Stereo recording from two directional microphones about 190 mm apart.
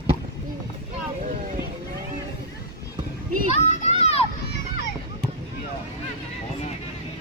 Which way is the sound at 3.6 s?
35° left (ahead or behind).